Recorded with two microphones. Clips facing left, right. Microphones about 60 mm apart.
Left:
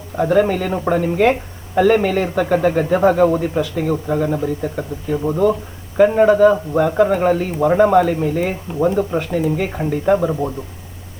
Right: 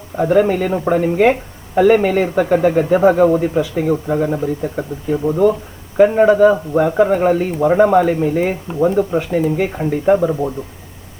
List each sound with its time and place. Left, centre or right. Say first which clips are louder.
0.2 s speech: right 2 dB; centre